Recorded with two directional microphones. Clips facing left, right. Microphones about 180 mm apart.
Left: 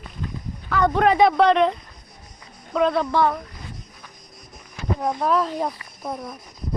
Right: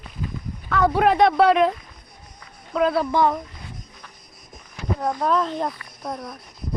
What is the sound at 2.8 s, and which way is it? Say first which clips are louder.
Speech: even; 5° right (ahead or behind).